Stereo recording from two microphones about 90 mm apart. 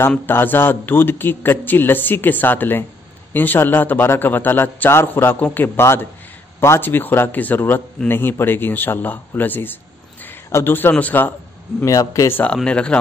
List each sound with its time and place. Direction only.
0.3 s a man's voice: 25° left (ahead or behind)
11.8 s a man's voice: 35° left (ahead or behind)
12.6 s speech: 10° left (ahead or behind)